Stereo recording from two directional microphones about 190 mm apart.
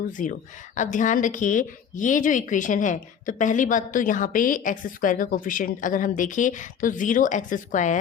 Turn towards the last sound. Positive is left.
turn(degrees=40)  # may be behind; listen again after turning